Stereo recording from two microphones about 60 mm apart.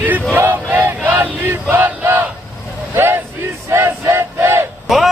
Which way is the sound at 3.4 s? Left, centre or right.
Right.